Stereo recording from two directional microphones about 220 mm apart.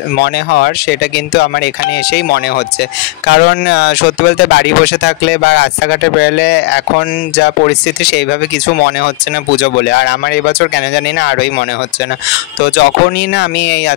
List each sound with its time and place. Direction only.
0.2 s speech: 45° left (ahead or behind)